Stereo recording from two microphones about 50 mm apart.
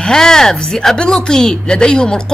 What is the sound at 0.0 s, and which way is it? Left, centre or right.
A woman's voice, centre.